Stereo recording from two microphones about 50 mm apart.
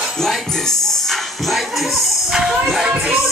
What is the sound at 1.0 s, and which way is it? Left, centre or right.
Speech, centre.